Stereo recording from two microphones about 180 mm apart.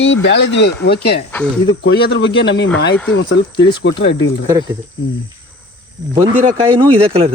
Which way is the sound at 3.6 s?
25° left (ahead or behind).